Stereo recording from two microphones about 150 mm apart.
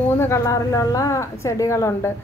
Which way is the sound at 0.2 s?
20° left (ahead or behind).